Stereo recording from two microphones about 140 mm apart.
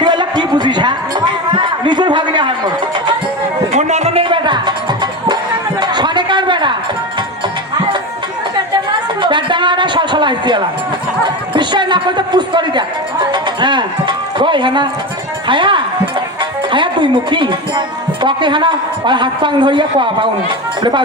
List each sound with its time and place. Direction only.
0.0 s speech: 30° right (ahead or behind)
3.7 s music: 55° right (ahead or behind); by 5.4 s 30° right (ahead or behind)
5.8 s a sound: 30° right (ahead or behind)
9.2 s a sound: 35° right (ahead or behind)
13.3 s music: 35° right (ahead or behind)
15.4 s speech: 35° right (ahead or behind)